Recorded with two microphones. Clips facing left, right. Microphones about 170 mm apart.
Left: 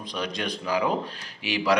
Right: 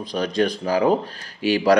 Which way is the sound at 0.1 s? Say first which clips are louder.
Right 9 dB; 40° right (ahead or behind).